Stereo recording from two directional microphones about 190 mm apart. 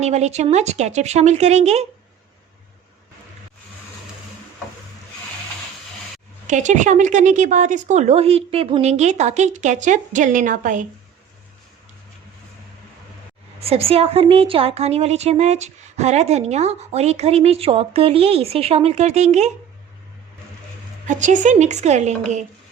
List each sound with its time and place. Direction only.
0.0 s a woman's voice: 35° right (ahead or behind)
6.5 s a woman's voice: 40° right (ahead or behind)
13.6 s a woman's voice: 30° right (ahead or behind)
21.1 s a woman's voice: 40° right (ahead or behind)